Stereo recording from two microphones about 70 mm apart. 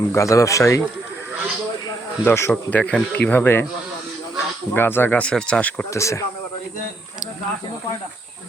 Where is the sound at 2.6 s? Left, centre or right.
Left.